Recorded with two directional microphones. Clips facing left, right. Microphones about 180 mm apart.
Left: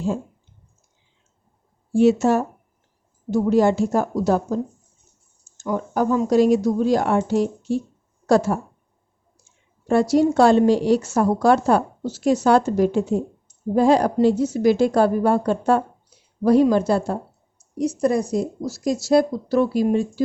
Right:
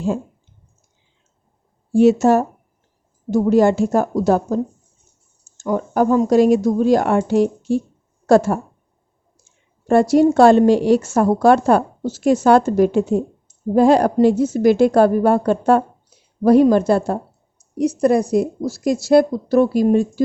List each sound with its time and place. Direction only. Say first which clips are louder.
1.9 s speech: right 4 dB; 45° right (ahead or behind)
5.5 s speech: right 4 dB; 50° right (ahead or behind); by 7.8 s 65° right (ahead or behind)
8.3 s speech: right 4 dB; 55° right (ahead or behind)
9.8 s speech: right 4 dB; 50° right (ahead or behind)
17.7 s speech: right 4 dB; 65° right (ahead or behind); by 20.2 s 50° right (ahead or behind)